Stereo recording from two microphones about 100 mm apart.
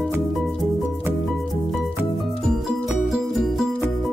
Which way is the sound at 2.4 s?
Centre (ahead or behind).